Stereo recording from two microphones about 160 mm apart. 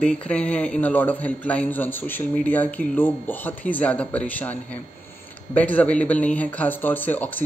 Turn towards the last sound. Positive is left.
turn(degrees=10)  # may be behind; listen again after turning